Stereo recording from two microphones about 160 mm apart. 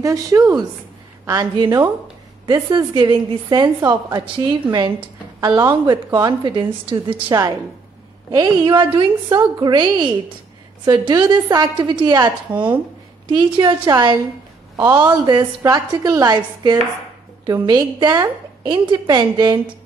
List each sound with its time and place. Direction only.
0.0 s a woman's voice: 20° right (ahead or behind)